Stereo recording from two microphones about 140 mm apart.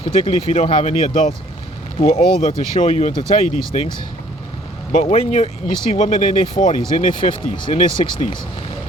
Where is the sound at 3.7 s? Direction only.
55° left (ahead or behind).